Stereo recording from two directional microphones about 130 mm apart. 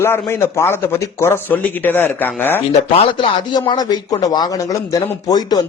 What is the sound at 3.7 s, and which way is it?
Speech, 30° left (ahead or behind).